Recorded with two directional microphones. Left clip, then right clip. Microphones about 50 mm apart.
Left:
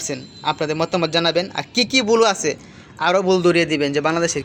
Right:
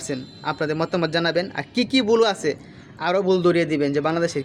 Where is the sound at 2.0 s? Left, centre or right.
Right.